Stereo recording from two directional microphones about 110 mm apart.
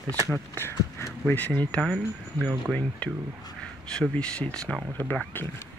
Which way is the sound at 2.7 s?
10° left (ahead or behind).